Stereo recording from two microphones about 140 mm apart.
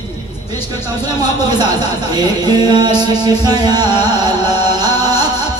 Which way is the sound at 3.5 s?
30° right (ahead or behind).